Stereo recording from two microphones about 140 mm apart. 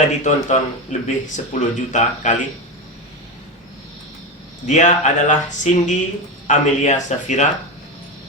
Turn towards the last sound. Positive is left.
turn(degrees=55)  # may be behind; listen again after turning